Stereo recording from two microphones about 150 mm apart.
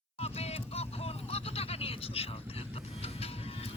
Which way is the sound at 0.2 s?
45° left (ahead or behind).